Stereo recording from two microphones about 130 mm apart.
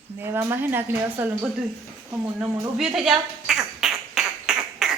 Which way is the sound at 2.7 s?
5° right (ahead or behind).